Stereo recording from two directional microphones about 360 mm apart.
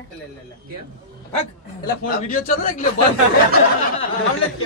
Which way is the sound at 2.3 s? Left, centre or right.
Left.